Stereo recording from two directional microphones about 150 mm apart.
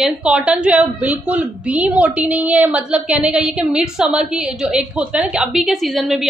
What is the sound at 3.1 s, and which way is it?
Speech, 45° right (ahead or behind).